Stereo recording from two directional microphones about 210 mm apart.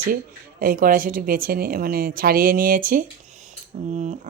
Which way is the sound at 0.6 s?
40° right (ahead or behind).